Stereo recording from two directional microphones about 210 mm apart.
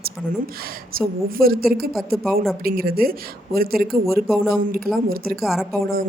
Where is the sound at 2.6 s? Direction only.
45° right (ahead or behind).